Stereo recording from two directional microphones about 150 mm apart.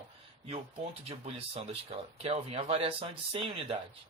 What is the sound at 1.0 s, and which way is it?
Speech, 45° right (ahead or behind).